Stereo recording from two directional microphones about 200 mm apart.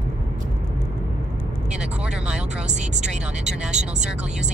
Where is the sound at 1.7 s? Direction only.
5° right (ahead or behind).